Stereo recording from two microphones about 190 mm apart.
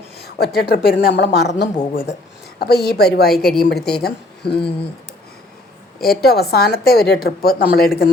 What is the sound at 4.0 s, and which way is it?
Speech, 55° left (ahead or behind).